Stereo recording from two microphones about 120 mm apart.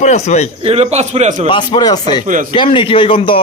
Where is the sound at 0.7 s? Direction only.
65° right (ahead or behind); by 1.4 s 80° right.